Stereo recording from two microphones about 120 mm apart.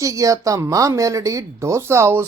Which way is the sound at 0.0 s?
30° right (ahead or behind).